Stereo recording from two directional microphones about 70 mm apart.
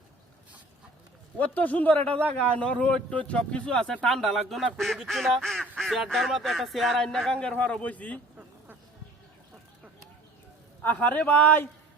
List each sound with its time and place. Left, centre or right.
1.4 s a man's voice: left
8.4 s vehicle: right
10.8 s speech: left